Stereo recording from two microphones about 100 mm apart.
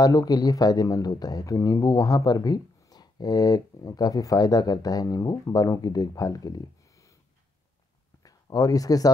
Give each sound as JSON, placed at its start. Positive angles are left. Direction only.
{"t": 0.0, "sound": "speech", "side_deg": 40}
{"t": 8.2, "sound": "speech", "side_deg": 40}